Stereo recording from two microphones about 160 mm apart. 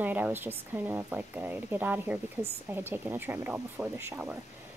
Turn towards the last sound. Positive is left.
turn(degrees=-10)  # may be behind; listen again after turning